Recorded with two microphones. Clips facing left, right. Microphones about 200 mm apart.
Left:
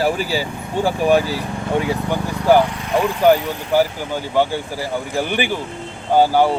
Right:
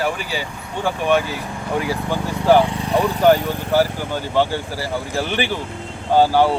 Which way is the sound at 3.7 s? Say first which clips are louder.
Left 1 dB; 15° left (ahead or behind).